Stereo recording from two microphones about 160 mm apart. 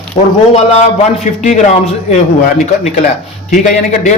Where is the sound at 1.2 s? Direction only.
50° left (ahead or behind).